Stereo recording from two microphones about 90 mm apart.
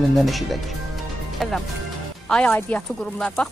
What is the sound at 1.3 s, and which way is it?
Music, 5° left (ahead or behind).